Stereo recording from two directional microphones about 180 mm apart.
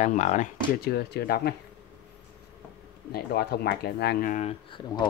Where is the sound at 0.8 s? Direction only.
60° left (ahead or behind).